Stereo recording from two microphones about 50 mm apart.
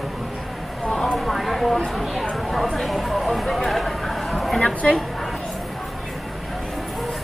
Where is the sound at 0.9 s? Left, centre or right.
Centre.